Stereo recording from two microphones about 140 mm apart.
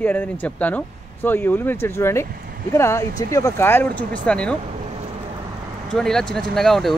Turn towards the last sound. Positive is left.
turn(degrees=5)  # may be behind; listen again after turning